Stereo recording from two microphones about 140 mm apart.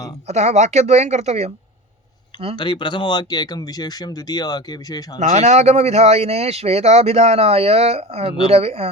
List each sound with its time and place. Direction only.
0.3 s a woman's voice: 55° right (ahead or behind)
2.6 s speech: 35° left (ahead or behind)
5.2 s speech: 55° right (ahead or behind)